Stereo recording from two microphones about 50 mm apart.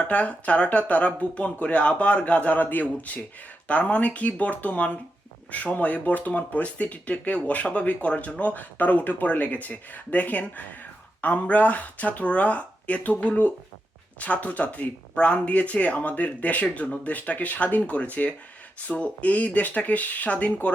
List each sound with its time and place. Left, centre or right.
0.0 s speech: left